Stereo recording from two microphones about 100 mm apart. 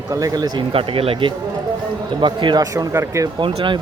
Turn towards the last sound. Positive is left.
turn(degrees=-55)  # may be behind; listen again after turning